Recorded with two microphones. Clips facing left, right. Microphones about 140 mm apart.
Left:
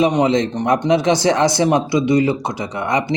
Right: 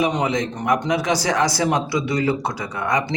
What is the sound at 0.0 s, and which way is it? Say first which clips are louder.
A man's voice: left 6 dB; 25° left (ahead or behind).